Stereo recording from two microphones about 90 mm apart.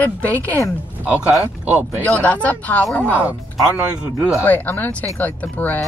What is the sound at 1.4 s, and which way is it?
Speech, 20° right (ahead or behind).